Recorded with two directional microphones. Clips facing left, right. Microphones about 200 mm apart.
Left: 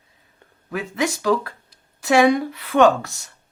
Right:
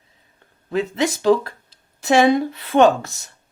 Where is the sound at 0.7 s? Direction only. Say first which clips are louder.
Right 3 dB; 25° right (ahead or behind).